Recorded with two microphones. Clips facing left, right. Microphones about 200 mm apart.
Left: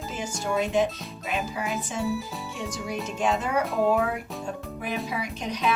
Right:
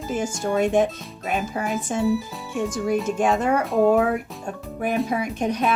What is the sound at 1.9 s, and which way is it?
A woman's voice, 50° right (ahead or behind).